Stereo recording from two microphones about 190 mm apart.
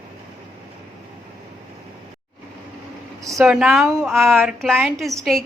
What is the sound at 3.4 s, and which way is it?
Speech, centre (ahead or behind).